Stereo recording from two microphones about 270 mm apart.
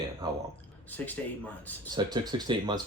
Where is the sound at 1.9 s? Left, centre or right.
Centre.